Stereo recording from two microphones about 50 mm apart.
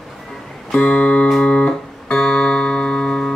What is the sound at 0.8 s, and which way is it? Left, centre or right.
Music, left.